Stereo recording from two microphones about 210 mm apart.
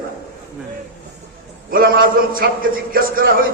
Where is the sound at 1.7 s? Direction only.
45° right (ahead or behind).